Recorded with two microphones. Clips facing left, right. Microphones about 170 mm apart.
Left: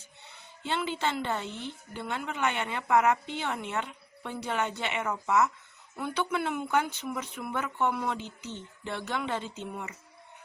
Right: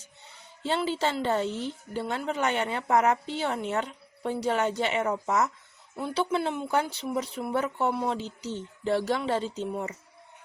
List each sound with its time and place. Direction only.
0.6 s a woman's voice: 35° right (ahead or behind)